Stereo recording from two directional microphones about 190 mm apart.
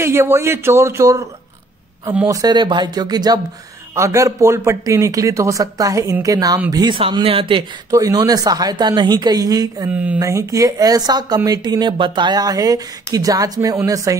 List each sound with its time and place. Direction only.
0.0 s speech: 15° right (ahead or behind)
9.8 s speech: 5° right (ahead or behind)